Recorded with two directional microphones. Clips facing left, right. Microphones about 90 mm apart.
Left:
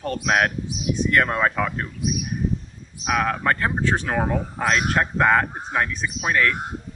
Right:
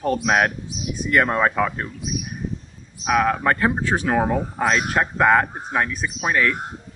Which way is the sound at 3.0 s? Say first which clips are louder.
Right 3 dB; 5° right (ahead or behind).